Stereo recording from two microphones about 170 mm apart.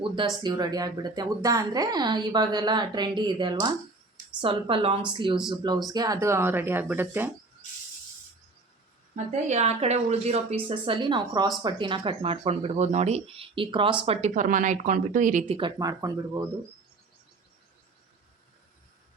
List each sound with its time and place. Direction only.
0.4 s a woman's voice: 25° right (ahead or behind)
9.1 s speech: 40° right (ahead or behind)
15.4 s a woman's voice: 30° right (ahead or behind)